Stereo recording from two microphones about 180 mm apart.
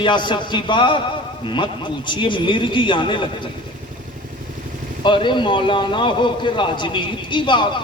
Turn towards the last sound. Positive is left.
turn(degrees=25)  # may be behind; listen again after turning